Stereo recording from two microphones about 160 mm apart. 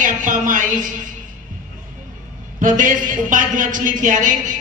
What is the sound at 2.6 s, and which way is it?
A man's voice, 55° right (ahead or behind).